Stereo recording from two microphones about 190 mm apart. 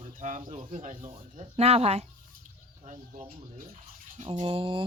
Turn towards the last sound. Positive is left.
turn(degrees=-25)  # may be behind; listen again after turning